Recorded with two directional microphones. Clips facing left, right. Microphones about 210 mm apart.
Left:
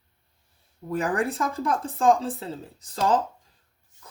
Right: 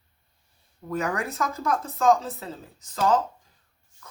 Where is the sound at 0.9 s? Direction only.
30° left (ahead or behind).